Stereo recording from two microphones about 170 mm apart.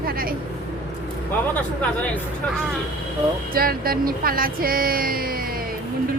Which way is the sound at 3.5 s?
60° right (ahead or behind).